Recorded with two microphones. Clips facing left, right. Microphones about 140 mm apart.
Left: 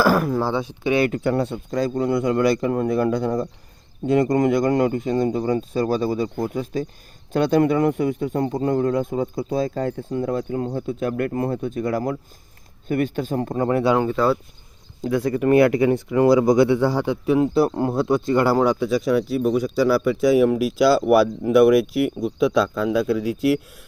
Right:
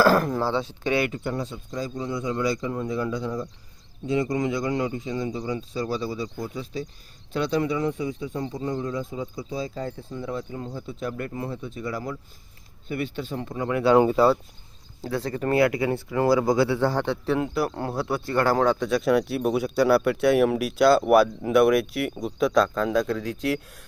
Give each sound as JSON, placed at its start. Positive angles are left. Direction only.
{"t": 0.0, "sound": "speech", "side_deg": 10}
{"t": 1.1, "sound": "speech", "side_deg": 70}
{"t": 14.0, "sound": "speech", "side_deg": -15}
{"t": 15.0, "sound": "speech", "side_deg": 15}
{"t": 17.4, "sound": "speech", "side_deg": 25}